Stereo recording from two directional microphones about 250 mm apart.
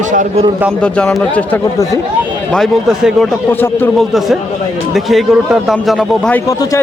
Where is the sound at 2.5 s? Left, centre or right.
Centre.